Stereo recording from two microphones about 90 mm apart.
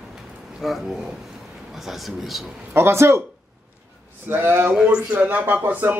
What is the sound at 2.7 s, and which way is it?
Speech, 30° right (ahead or behind).